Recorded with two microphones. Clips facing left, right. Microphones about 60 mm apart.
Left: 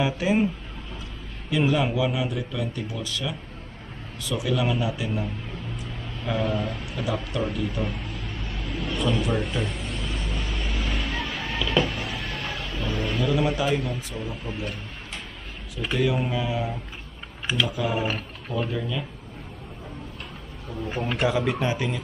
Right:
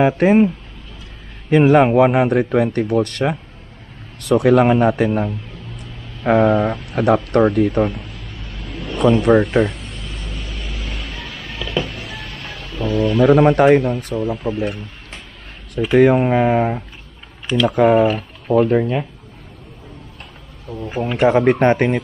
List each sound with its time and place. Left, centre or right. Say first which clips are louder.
0.0 s speech: right 10 dB; right
1.5 s speech: right 12 dB; right
8.9 s speech: right 13 dB; right
9.7 s a sound: right 1 dB; centre
13.2 s speech: right 13 dB; right
14.4 s speech: right 11 dB; right
15.9 s speech: right 12 dB; right
21.3 s speech: right 11 dB; right